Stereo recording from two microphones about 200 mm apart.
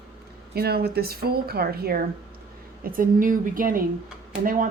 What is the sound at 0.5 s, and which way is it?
Speech, 50° right (ahead or behind).